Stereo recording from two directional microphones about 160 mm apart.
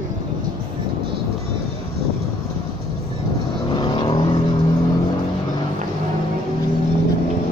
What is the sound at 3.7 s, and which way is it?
Vehicle, 25° left (ahead or behind).